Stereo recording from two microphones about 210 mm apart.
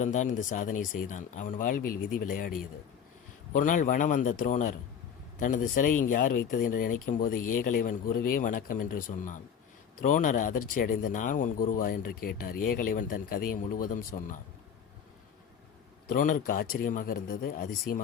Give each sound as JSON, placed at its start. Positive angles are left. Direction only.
{"t": 0.0, "sound": "speech", "side_deg": 35}
{"t": 3.5, "sound": "speech", "side_deg": 40}
{"t": 16.0, "sound": "speech", "side_deg": 40}